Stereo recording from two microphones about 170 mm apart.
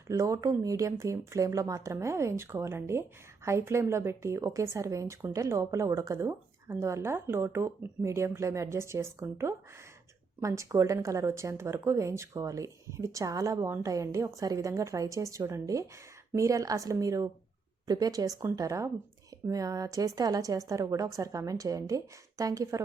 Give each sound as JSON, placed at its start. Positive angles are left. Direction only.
{"t": 0.1, "sound": "a woman's voice", "side_deg": -20}